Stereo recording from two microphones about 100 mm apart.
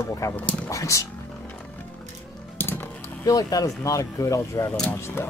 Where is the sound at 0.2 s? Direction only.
30° left (ahead or behind).